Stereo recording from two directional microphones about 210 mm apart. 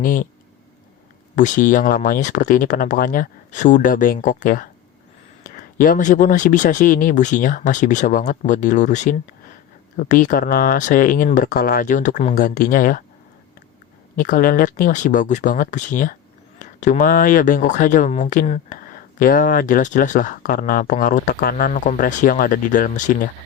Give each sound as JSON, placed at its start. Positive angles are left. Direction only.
{"t": 0.0, "sound": "speech", "side_deg": 40}
{"t": 1.4, "sound": "speech", "side_deg": 35}
{"t": 14.2, "sound": "speech", "side_deg": 40}